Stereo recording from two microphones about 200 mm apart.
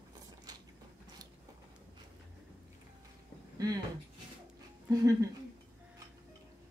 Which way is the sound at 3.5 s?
20° right (ahead or behind).